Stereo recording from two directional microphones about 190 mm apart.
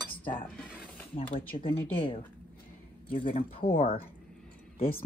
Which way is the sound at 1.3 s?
30° left (ahead or behind).